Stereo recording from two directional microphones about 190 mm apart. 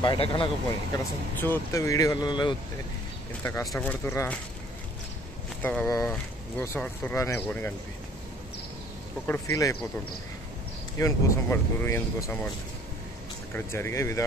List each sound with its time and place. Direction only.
0.0 s speech: 25° left (ahead or behind)
0.9 s speech: 15° left (ahead or behind)
5.6 s speech: 5° left (ahead or behind)
5.9 s speech: 15° left (ahead or behind)
9.3 s speech: 15° left (ahead or behind)
11.0 s speech: 15° left (ahead or behind)
13.6 s speech: 15° left (ahead or behind)